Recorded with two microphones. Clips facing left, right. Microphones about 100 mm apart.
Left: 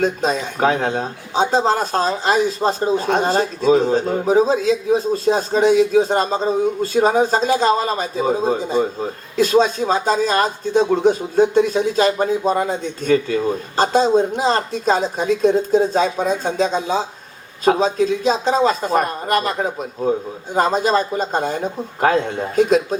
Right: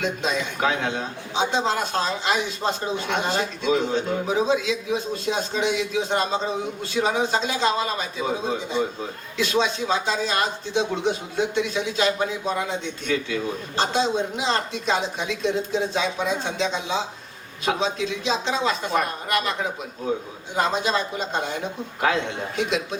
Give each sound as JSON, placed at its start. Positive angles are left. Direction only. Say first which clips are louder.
{"t": 0.0, "sound": "speech", "louder": "left 6 dB", "side_deg": 40}